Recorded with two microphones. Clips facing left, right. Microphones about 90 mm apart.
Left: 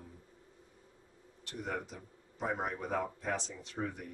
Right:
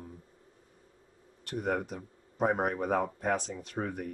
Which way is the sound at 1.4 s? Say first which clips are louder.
Right 8 dB; 55° right (ahead or behind).